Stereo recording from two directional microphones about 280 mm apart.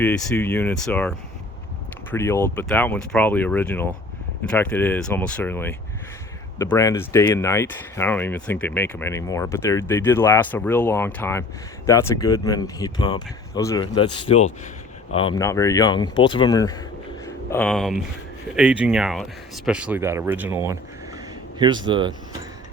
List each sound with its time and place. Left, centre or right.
0.0 s speech: centre
21.6 s speech: centre